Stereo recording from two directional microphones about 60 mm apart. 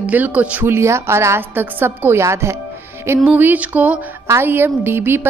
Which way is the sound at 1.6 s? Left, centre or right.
Right.